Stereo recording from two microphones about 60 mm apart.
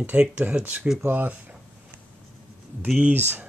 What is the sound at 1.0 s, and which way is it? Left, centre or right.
Speech, right.